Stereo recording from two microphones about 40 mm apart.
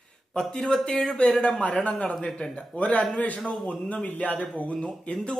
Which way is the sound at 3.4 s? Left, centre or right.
Centre.